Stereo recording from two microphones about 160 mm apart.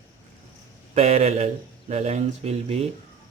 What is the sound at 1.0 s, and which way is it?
Speech, 40° right (ahead or behind).